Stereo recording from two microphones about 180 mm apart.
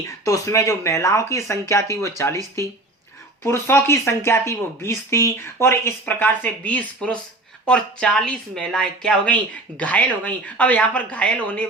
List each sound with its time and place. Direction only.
0.3 s speech: 15° left (ahead or behind)
3.4 s speech: 15° left (ahead or behind)